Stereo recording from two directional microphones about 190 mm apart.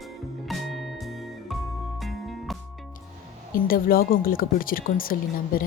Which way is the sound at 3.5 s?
50° left (ahead or behind).